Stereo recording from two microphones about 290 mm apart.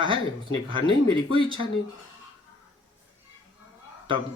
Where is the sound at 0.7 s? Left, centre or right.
Centre.